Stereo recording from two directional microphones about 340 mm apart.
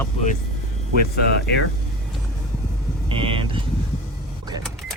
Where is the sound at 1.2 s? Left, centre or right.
Left.